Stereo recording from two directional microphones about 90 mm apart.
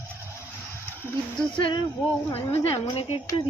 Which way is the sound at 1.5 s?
65° left (ahead or behind).